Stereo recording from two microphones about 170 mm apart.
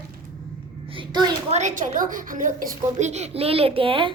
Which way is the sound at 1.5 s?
45° right (ahead or behind).